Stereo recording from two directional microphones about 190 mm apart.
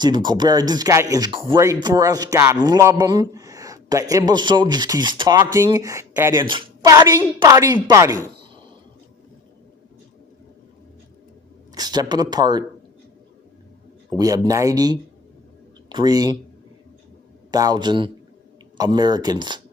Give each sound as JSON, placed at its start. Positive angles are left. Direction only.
{"t": 0.0, "sound": "a man's voice", "side_deg": -20}
{"t": 6.4, "sound": "a woman's voice", "side_deg": -25}
{"t": 11.7, "sound": "speech", "side_deg": -20}
{"t": 14.1, "sound": "speech", "side_deg": -20}
{"t": 17.5, "sound": "speech", "side_deg": -20}